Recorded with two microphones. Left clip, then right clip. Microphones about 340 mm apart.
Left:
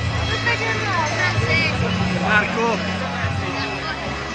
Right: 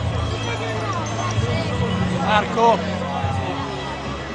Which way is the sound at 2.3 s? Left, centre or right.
Right.